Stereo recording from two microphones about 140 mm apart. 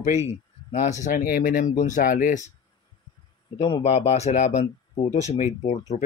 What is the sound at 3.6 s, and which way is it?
Speech, 45° left (ahead or behind).